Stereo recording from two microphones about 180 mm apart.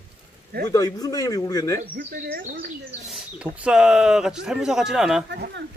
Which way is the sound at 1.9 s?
50° right (ahead or behind).